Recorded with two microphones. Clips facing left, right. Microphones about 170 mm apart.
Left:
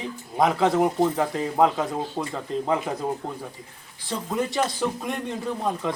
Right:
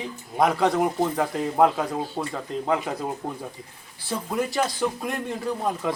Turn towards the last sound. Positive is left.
turn(degrees=-5)  # may be behind; listen again after turning